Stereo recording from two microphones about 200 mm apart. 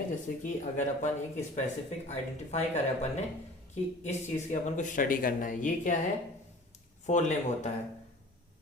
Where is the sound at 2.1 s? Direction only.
35° left (ahead or behind).